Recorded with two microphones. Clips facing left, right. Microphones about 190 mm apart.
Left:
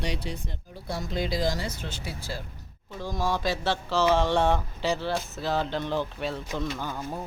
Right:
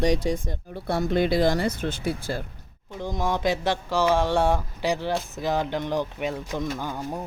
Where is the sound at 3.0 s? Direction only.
20° right (ahead or behind).